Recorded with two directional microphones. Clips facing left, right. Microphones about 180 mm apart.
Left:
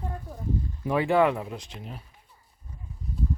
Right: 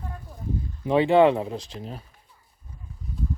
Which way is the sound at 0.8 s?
25° right (ahead or behind).